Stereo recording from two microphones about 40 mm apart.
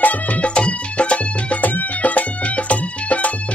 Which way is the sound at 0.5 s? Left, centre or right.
Left.